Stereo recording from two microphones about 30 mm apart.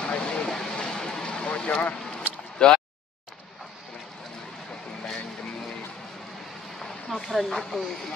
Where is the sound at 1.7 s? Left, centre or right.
Left.